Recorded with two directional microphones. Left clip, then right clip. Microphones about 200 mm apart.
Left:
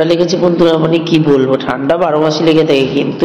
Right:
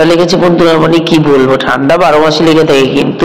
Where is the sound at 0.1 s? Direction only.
15° right (ahead or behind).